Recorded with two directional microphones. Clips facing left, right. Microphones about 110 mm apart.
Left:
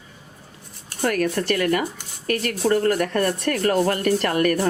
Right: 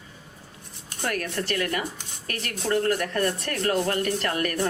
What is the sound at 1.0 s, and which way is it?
Speech, 55° left (ahead or behind).